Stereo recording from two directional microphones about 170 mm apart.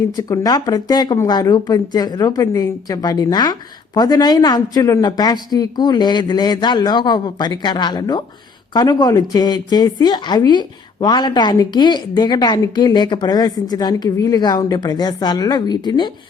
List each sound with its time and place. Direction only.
0.2 s speech: 20° left (ahead or behind)